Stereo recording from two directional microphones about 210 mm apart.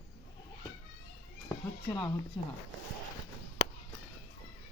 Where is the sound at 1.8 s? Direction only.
20° left (ahead or behind).